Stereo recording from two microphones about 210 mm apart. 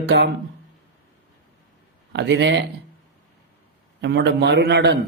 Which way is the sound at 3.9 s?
55° right (ahead or behind).